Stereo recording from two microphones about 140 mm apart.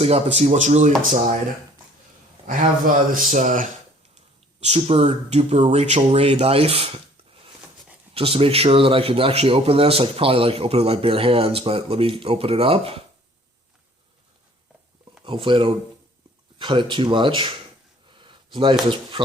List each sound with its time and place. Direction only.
0.0 s speech: 50° right (ahead or behind)
2.5 s speech: 75° right (ahead or behind)
4.6 s speech: 50° right (ahead or behind)
8.1 s speech: 45° right (ahead or behind)
15.2 s speech: 40° right (ahead or behind)
18.2 s a sound: 35° right (ahead or behind)